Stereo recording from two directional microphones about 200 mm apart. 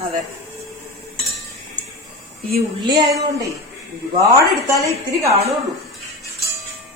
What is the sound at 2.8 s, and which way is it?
Speech, 25° right (ahead or behind).